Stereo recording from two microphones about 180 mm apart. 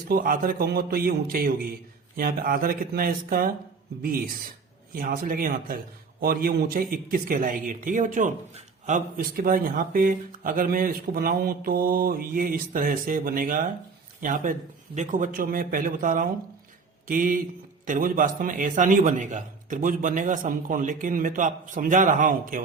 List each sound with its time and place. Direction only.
0.1 s speech: 50° right (ahead or behind)
4.9 s speech: 50° right (ahead or behind)